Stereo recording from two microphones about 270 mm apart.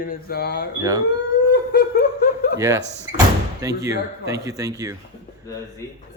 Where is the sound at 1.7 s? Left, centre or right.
Left.